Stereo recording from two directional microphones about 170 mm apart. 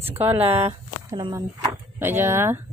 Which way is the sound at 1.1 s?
25° right (ahead or behind).